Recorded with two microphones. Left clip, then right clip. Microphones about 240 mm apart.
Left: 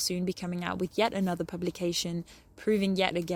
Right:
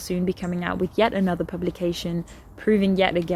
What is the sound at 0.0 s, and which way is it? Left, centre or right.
Speech, left.